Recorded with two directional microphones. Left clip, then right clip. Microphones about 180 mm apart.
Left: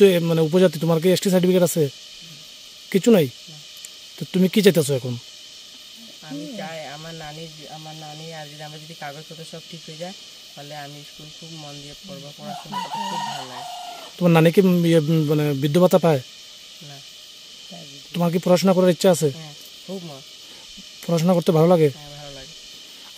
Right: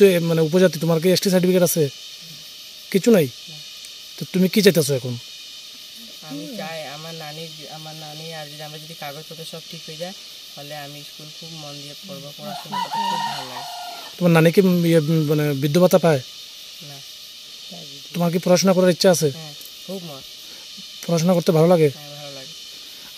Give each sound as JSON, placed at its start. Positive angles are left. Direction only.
{"t": 0.0, "sound": "speech", "side_deg": 5}
{"t": 2.9, "sound": "speech", "side_deg": 5}
{"t": 6.3, "sound": "snake", "side_deg": 0}
{"t": 8.2, "sound": "music", "side_deg": 0}
{"t": 9.0, "sound": "speech", "side_deg": 0}
{"t": 12.7, "sound": "chicken", "side_deg": -20}
{"t": 14.2, "sound": "speech", "side_deg": 5}
{"t": 18.1, "sound": "speech", "side_deg": 5}
{"t": 21.0, "sound": "speech", "side_deg": 5}